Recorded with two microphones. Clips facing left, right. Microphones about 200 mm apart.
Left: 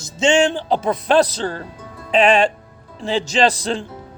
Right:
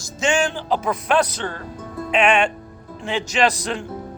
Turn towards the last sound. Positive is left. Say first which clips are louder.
# left 3 dB
turn(degrees=30)  # may be behind; listen again after turning